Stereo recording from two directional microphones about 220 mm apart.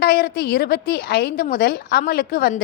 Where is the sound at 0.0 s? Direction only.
45° left (ahead or behind).